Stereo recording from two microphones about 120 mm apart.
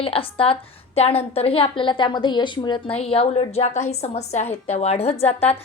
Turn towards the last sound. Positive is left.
turn(degrees=60)  # may be behind; listen again after turning